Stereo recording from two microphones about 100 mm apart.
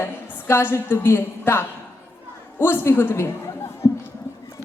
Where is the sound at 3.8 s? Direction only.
30° left (ahead or behind).